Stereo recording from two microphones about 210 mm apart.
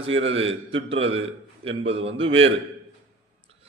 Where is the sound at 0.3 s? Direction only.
25° right (ahead or behind).